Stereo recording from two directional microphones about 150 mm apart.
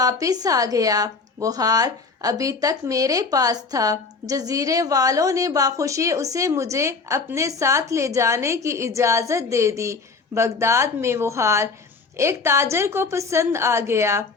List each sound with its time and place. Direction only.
0.0 s a woman's voice: 25° right (ahead or behind)